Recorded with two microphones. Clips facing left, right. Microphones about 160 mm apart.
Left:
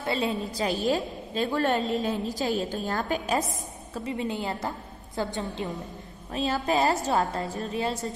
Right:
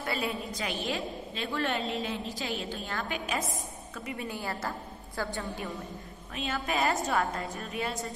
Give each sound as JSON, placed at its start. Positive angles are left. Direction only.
{"t": 0.0, "sound": "a woman's voice", "side_deg": 25}
{"t": 4.1, "sound": "a woman's voice", "side_deg": 20}
{"t": 6.3, "sound": "a woman's voice", "side_deg": 35}